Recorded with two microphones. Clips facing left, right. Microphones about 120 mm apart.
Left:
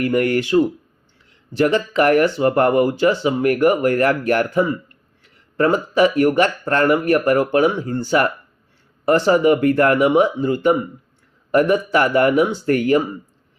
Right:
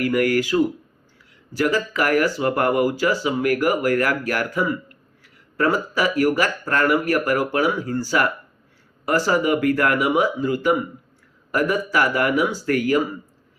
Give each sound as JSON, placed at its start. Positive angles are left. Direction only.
{"t": 0.0, "sound": "speech", "side_deg": 30}